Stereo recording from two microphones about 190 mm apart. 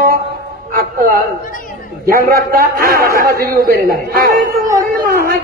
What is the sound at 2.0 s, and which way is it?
A man's voice, 50° right (ahead or behind).